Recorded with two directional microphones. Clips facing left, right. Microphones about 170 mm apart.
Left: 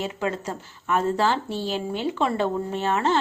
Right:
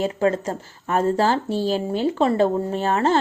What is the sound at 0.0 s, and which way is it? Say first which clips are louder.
A woman's voice: right 7 dB; 40° right (ahead or behind).